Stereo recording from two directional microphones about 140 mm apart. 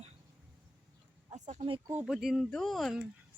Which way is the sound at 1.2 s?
55° right (ahead or behind).